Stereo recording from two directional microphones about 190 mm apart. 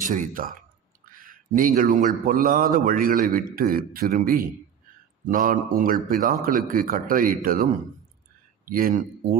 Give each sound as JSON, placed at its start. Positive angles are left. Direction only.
{"t": 0.0, "sound": "a man's voice", "side_deg": -45}